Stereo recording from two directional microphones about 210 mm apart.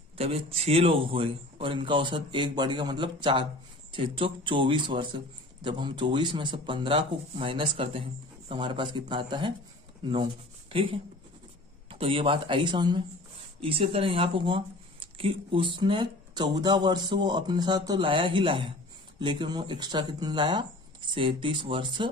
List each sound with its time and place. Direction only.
0.2 s a man's voice: 30° right (ahead or behind)